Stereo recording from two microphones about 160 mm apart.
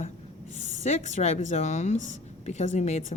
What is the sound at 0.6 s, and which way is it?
A woman's voice, 45° left (ahead or behind).